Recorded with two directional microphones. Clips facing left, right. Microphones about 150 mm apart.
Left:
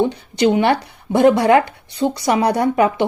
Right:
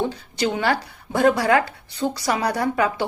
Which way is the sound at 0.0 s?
20° left (ahead or behind).